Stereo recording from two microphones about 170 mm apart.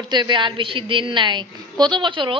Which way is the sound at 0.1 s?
25° right (ahead or behind).